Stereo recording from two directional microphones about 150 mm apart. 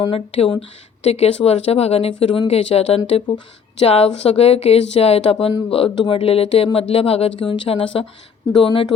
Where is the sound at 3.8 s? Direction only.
40° left (ahead or behind).